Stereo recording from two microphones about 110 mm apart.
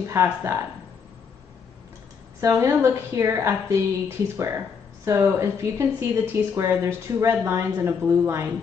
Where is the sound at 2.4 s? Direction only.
25° right (ahead or behind).